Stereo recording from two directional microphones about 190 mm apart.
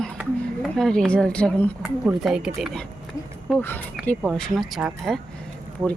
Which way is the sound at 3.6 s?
10° left (ahead or behind).